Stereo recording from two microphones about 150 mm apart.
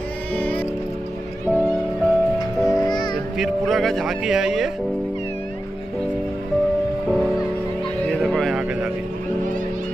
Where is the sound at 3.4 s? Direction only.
Centre (ahead or behind).